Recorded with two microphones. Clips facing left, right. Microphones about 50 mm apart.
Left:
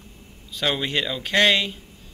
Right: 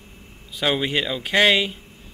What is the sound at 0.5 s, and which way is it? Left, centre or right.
Speech, centre.